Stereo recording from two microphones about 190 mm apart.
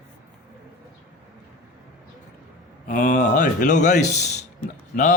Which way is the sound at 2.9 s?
45° left (ahead or behind).